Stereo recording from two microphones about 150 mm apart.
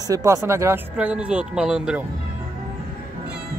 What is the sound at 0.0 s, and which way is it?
Speech, 20° right (ahead or behind).